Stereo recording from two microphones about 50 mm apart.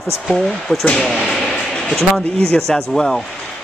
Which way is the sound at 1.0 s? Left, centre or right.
Centre.